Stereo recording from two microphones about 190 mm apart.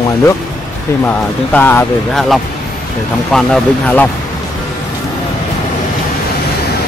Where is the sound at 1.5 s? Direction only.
10° left (ahead or behind).